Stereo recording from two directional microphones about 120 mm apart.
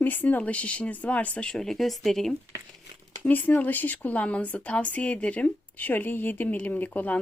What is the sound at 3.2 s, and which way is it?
Speech, 15° left (ahead or behind).